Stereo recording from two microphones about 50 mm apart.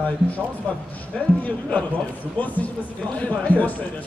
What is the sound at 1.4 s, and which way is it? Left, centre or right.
A man's voice, left.